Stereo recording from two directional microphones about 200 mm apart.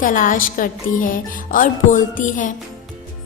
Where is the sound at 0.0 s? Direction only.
40° left (ahead or behind).